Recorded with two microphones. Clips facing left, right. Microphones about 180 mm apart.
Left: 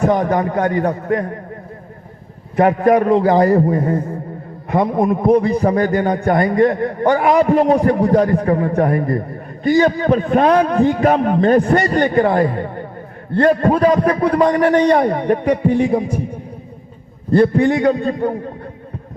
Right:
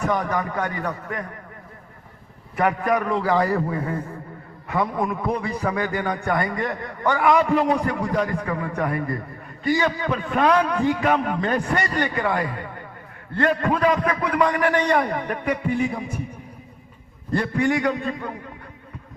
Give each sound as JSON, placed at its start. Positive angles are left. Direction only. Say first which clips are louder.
{"t": 0.2, "sound": "a man's voice", "louder": "left 8 dB", "side_deg": 45}
{"t": 2.6, "sound": "a man's voice", "louder": "left 9 dB", "side_deg": 30}
{"t": 3.2, "sound": "a man's voice", "louder": "left 8 dB", "side_deg": 40}
{"t": 17.3, "sound": "a man's voice", "louder": "left 9 dB", "side_deg": 30}